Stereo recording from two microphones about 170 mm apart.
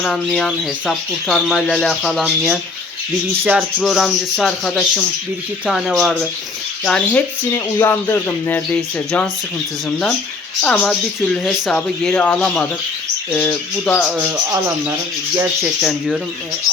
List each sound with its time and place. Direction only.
0.0 s speech: 5° left (ahead or behind)
3.8 s speech: centre (ahead or behind)
7.5 s speech: 15° left (ahead or behind)
10.6 s speech: 5° left (ahead or behind)
14.3 s speech: 15° right (ahead or behind)
15.8 s speech: centre (ahead or behind)